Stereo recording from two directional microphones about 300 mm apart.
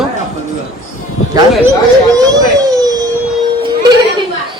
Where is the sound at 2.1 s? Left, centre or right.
Centre.